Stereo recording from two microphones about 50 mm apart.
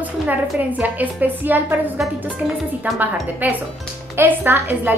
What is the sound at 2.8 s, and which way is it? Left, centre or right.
A woman's voice, right.